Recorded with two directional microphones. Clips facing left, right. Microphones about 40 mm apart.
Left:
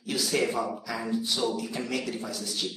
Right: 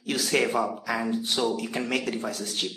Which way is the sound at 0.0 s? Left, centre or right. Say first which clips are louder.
Right 2 dB; right.